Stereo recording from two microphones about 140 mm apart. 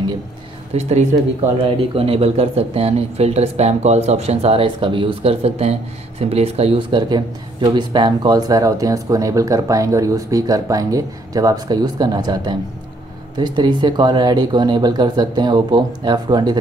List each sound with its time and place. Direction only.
0.7 s speech: 50° right (ahead or behind)
1.6 s speech: 40° right (ahead or behind)